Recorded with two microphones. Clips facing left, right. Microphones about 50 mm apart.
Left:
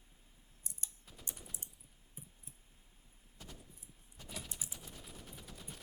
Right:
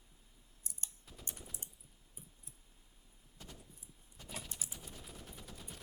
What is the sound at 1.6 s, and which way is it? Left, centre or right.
Typing, right.